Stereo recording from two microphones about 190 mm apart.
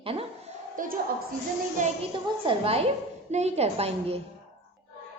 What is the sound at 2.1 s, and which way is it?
A woman's voice, 30° right (ahead or behind).